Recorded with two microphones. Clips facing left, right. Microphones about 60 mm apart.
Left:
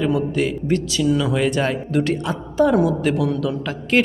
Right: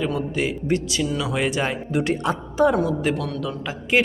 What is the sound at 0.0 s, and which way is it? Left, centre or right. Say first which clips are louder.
A man's voice: left 4 dB; centre.